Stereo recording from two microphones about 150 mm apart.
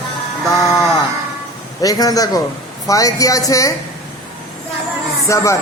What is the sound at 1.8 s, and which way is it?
A man's voice, 25° left (ahead or behind).